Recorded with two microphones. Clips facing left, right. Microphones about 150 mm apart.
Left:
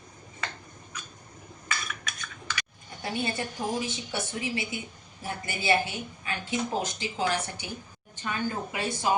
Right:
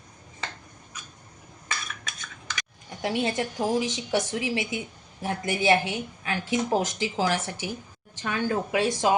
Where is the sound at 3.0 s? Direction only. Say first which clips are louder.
Right 5 dB; 90° right.